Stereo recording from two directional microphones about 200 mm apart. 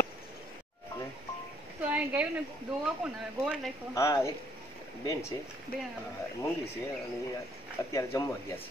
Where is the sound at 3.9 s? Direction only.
15° left (ahead or behind).